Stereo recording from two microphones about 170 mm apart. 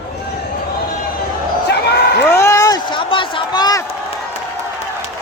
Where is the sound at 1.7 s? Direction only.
90° left.